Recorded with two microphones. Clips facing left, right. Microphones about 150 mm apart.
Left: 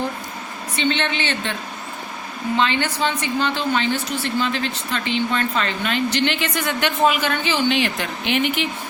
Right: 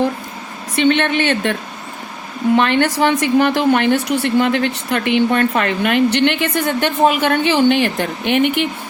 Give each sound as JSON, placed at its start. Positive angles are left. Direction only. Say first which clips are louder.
{"t": 0.8, "sound": "a woman's voice", "louder": "right 8 dB", "side_deg": -60}
{"t": 2.6, "sound": "a woman's voice", "louder": "right 5 dB", "side_deg": -65}